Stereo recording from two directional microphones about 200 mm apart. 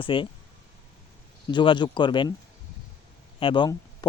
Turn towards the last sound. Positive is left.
turn(degrees=25)  # may be behind; listen again after turning